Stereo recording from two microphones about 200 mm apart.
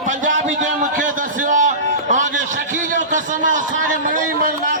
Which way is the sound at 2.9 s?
40° right (ahead or behind).